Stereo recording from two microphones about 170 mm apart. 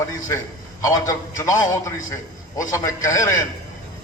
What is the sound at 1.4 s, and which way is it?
A man's voice, 20° left (ahead or behind).